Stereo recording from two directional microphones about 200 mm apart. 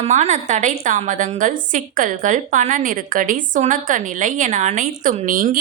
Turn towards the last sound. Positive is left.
turn(degrees=-40)  # may be behind; listen again after turning